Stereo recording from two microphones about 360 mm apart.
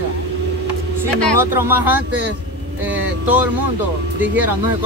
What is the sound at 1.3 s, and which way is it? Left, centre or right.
Speech, centre.